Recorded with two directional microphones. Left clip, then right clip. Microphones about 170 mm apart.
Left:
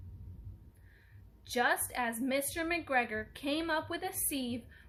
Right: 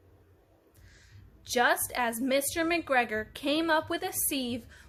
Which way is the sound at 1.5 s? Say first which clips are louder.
Right 5 dB; 45° right (ahead or behind).